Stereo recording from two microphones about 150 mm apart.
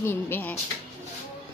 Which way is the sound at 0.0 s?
15° left (ahead or behind).